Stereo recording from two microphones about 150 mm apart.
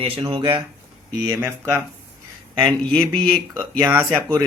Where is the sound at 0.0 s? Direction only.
35° right (ahead or behind); by 1.8 s 15° right (ahead or behind).